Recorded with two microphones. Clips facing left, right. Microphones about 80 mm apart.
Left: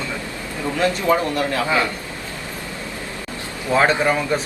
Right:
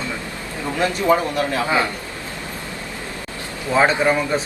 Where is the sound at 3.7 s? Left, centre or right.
Centre.